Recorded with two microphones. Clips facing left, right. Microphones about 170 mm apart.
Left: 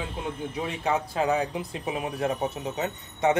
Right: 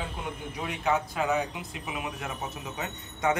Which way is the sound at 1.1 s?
35° left (ahead or behind).